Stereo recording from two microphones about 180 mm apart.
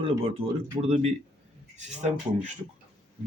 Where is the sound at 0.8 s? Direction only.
35° right (ahead or behind).